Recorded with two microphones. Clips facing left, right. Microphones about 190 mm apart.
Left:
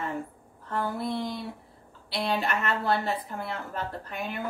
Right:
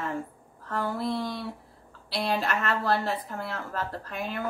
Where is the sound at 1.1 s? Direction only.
20° left (ahead or behind).